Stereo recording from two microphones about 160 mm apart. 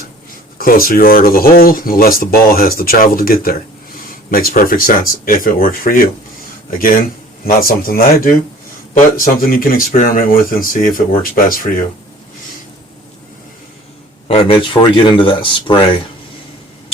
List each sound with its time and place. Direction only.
0.6 s speech: 65° left (ahead or behind)
14.3 s speech: 35° left (ahead or behind)